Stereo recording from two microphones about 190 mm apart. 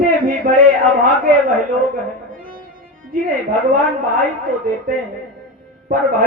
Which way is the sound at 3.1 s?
45° right (ahead or behind).